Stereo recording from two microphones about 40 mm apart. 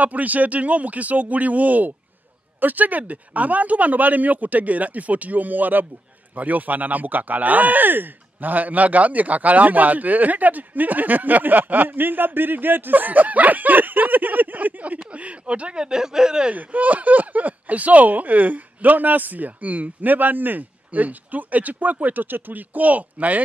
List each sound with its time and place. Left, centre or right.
0.0 s speech: right
15.0 s speech: right
16.5 s speech: right